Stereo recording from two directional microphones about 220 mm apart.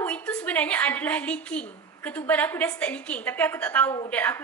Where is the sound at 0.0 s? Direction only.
5° left (ahead or behind).